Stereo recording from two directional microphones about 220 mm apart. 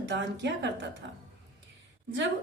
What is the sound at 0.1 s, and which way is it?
Speech, 50° right (ahead or behind).